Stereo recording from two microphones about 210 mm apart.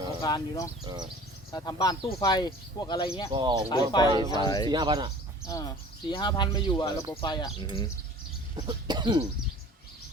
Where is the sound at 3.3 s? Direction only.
20° right (ahead or behind).